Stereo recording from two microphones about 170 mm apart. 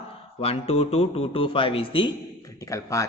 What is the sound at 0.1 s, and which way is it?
Speech, 35° left (ahead or behind).